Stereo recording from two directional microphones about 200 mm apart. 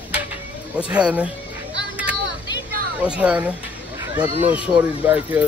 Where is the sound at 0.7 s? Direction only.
5° right (ahead or behind).